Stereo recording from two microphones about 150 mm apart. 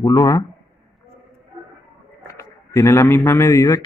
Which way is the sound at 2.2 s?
20° left (ahead or behind).